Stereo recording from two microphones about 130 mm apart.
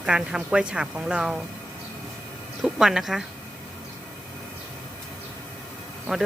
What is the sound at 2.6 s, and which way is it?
Speech, 5° right (ahead or behind).